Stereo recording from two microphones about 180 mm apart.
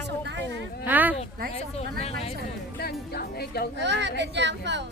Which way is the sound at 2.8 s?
60° left (ahead or behind).